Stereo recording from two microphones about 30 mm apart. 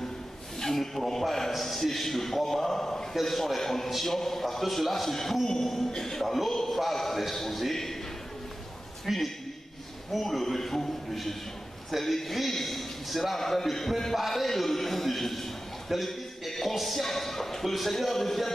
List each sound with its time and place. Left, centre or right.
0.6 s a sound: centre
1.5 s a man's voice: centre
3.2 s a man's voice: centre
5.9 s music: centre
6.2 s a man's voice: centre
9.1 s a man's voice: centre
10.1 s a man's voice: centre
12.0 s a man's voice: centre
16.1 s a sound: centre
16.6 s a man's voice: centre